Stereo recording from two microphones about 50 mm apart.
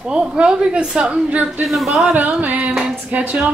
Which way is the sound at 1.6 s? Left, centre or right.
Centre.